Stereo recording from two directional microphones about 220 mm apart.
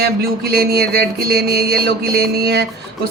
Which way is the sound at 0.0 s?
45° right (ahead or behind).